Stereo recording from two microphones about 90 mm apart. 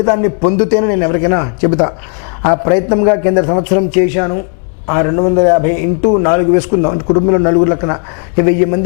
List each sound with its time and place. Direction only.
0.0 s a man's voice: 20° left (ahead or behind)